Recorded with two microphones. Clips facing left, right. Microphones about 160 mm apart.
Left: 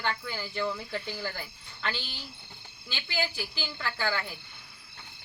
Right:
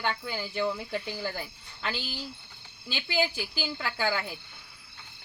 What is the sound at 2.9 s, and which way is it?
Speech, 15° right (ahead or behind).